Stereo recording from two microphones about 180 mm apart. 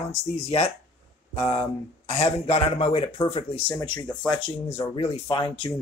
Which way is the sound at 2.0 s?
35° left (ahead or behind).